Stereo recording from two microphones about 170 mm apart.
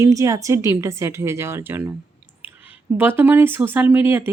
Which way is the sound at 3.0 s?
10° right (ahead or behind).